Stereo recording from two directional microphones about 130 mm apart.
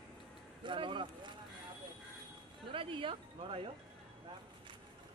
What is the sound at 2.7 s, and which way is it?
Speech, 40° right (ahead or behind).